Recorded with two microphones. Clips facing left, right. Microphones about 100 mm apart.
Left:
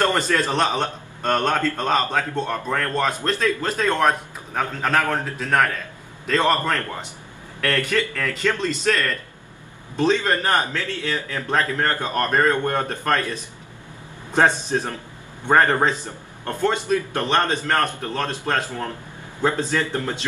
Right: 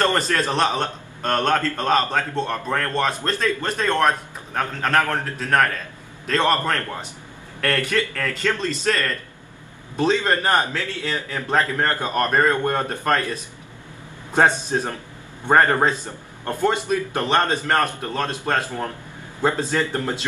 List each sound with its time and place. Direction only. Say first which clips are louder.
0.0 s a man's voice: even; 5° left (ahead or behind)
7.9 s a man's voice: even; centre (ahead or behind)
9.9 s a man's voice: even; 10° right (ahead or behind)